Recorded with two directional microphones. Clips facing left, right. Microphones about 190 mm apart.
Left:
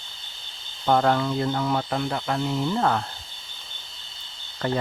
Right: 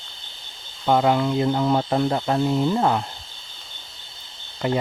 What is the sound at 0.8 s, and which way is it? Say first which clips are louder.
Speech: right 2 dB; 10° right (ahead or behind).